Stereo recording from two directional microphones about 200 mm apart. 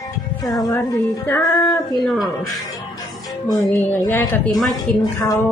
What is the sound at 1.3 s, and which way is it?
Speech, 10° left (ahead or behind).